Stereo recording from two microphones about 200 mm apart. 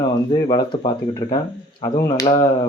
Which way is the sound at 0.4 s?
25° left (ahead or behind).